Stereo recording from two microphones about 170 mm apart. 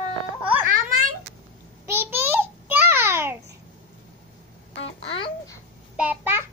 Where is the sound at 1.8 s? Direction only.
15° right (ahead or behind).